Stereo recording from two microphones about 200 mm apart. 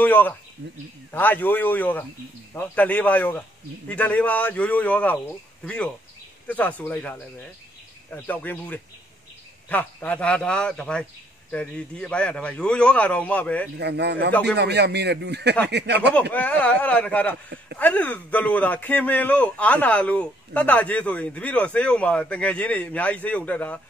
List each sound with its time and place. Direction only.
0.0 s a man's voice: 10° left (ahead or behind)
13.7 s speech: 55° right (ahead or behind)
16.3 s a man's voice: 5° left (ahead or behind)